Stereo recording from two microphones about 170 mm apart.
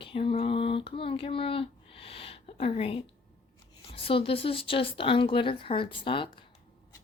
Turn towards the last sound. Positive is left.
turn(degrees=30)  # may be behind; listen again after turning